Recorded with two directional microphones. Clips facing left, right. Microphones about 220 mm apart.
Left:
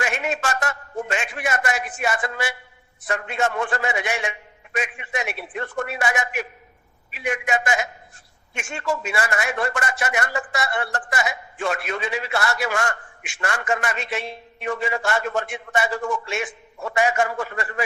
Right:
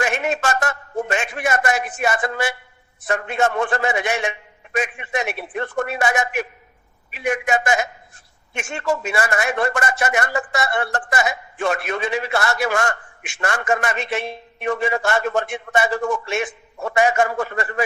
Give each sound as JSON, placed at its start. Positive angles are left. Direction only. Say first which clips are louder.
{"t": 0.0, "sound": "a man's voice", "louder": "right 4 dB", "side_deg": -45}